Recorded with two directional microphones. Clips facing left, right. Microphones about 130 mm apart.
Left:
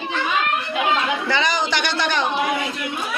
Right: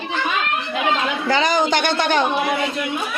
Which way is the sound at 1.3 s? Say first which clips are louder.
Right 6 dB; 45° right (ahead or behind).